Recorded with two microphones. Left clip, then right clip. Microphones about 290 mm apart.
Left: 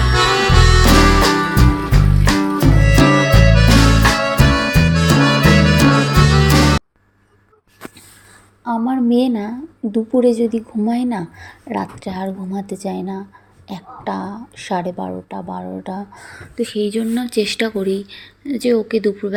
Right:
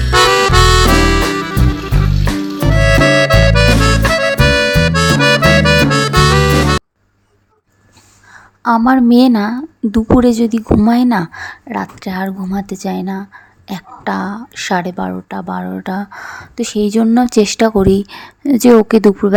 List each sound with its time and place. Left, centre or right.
0.1 s music: centre
8.6 s a sound: right
9.0 s a woman's voice: right
11.1 s speech: right
11.4 s a woman's voice: right
16.3 s speech: right